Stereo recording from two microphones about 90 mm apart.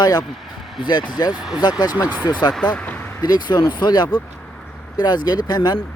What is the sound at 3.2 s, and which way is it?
Speech, 50° left (ahead or behind).